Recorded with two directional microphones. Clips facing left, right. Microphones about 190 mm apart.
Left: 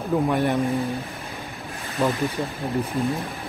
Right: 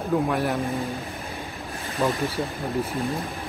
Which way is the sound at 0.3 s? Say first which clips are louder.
Left 3 dB; centre (ahead or behind).